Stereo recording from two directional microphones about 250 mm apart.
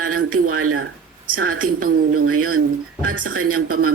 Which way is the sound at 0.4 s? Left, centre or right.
Right.